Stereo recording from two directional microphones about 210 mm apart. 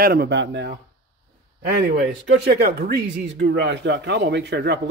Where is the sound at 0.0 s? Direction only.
45° right (ahead or behind).